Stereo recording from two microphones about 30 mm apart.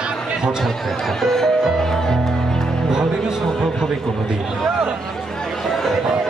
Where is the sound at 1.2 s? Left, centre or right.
Centre.